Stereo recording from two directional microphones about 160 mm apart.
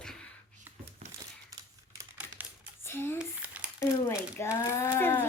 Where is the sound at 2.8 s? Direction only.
15° left (ahead or behind).